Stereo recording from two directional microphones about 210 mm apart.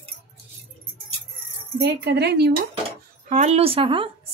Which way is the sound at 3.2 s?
35° right (ahead or behind).